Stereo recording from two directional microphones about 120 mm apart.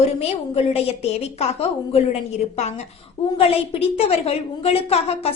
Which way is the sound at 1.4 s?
55° left (ahead or behind).